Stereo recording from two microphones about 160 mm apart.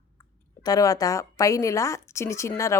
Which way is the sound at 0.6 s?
20° left (ahead or behind).